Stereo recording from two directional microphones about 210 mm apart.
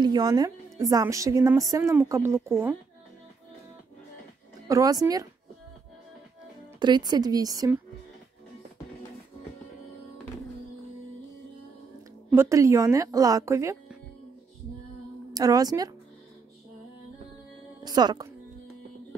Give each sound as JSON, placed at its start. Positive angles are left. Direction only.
{"t": 0.0, "sound": "a woman's voice", "side_deg": -20}
{"t": 4.6, "sound": "a woman's voice", "side_deg": -15}
{"t": 6.8, "sound": "a woman's voice", "side_deg": -20}
{"t": 12.3, "sound": "a woman's voice", "side_deg": -15}
{"t": 15.3, "sound": "a woman's voice", "side_deg": -15}
{"t": 17.8, "sound": "a woman's voice", "side_deg": -20}